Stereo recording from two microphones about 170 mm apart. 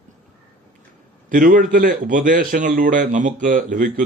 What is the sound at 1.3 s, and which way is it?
Speech, 50° right (ahead or behind).